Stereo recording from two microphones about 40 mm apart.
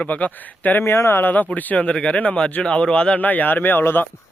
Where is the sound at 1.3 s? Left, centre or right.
Left.